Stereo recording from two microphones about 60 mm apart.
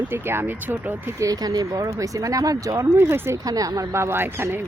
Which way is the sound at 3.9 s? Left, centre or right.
Right.